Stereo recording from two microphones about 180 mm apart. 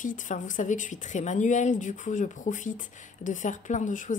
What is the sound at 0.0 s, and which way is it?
A woman's voice, 45° left (ahead or behind).